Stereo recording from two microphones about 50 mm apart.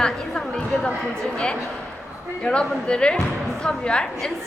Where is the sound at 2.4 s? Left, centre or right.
Left.